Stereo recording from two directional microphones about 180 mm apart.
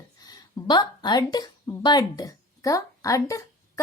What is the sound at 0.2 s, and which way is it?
A woman's voice, 20° left (ahead or behind).